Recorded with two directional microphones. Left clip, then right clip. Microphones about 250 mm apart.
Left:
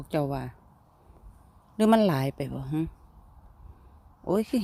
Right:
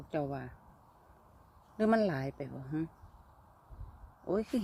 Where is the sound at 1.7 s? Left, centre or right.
Left.